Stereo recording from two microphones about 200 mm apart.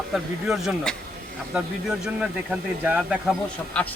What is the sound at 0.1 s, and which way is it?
Speech, centre (ahead or behind).